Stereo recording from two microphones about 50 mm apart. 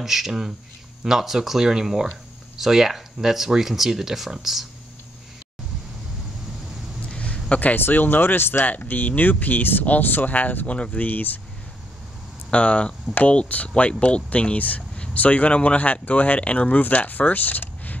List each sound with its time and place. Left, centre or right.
0.0 s speech: centre
7.1 s a sound: left
7.4 s a man's voice: left
7.7 s speech: left
8.6 s speech: left
12.4 s speech: left